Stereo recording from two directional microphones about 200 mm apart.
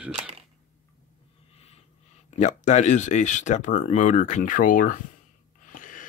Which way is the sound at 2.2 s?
35° left (ahead or behind).